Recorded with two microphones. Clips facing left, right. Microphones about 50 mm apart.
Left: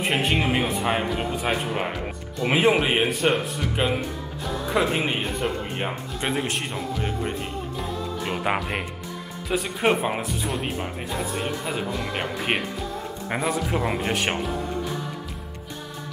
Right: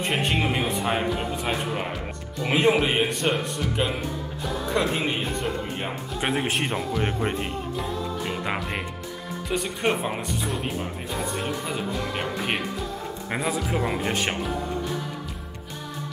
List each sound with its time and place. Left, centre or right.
0.0 s speech: centre
3.7 s speech: centre
5.4 s speech: left
6.2 s speech: centre
6.6 s speech: right
8.3 s speech: centre
9.5 s speech: centre
11.3 s speech: centre
12.1 s speech: centre
13.3 s speech: centre